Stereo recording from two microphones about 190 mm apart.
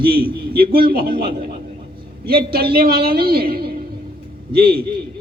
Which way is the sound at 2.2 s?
50° right (ahead or behind).